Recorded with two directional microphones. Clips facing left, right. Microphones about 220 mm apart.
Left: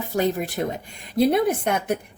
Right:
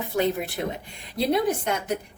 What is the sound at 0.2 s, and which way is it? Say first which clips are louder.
Speech: left 2 dB; 40° left (ahead or behind).